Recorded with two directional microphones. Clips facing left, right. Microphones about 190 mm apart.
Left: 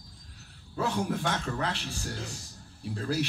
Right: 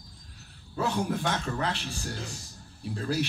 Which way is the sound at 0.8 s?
20° right (ahead or behind).